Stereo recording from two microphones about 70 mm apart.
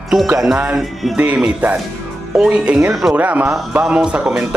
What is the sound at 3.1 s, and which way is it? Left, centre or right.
Speech, right.